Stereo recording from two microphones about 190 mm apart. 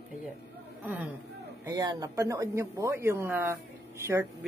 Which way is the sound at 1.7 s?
20° right (ahead or behind).